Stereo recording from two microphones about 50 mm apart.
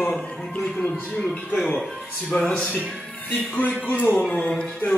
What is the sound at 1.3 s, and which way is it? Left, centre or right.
Speech, left.